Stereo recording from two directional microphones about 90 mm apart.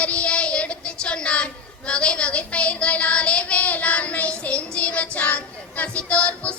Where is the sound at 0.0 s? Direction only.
15° left (ahead or behind).